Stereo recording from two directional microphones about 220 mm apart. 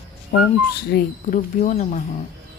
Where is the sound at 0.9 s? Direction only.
45° left (ahead or behind).